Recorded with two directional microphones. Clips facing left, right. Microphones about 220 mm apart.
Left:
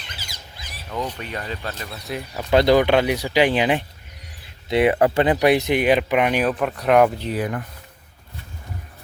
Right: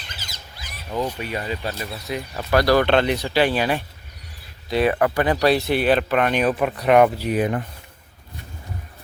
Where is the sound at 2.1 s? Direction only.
5° left (ahead or behind).